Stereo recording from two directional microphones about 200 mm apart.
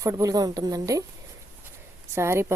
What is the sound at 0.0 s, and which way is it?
A woman's voice, 15° right (ahead or behind).